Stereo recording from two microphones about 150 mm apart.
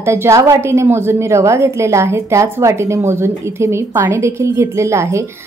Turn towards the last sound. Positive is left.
turn(degrees=-20)  # may be behind; listen again after turning